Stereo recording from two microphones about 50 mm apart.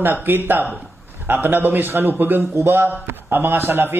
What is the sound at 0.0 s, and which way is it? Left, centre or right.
A man's voice, right.